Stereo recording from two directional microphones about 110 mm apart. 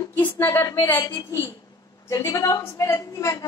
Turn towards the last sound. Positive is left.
turn(degrees=30)  # may be behind; listen again after turning